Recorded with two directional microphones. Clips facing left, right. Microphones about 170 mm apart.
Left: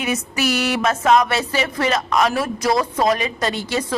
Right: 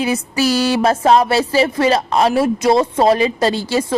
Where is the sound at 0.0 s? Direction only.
30° right (ahead or behind).